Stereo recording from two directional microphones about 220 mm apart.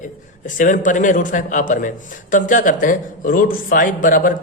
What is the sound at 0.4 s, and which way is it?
Speech, 35° left (ahead or behind).